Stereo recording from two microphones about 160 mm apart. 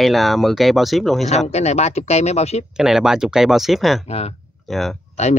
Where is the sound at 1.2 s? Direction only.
45° left (ahead or behind).